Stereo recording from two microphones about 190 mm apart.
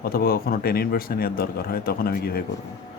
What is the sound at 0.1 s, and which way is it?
Speech, 50° left (ahead or behind).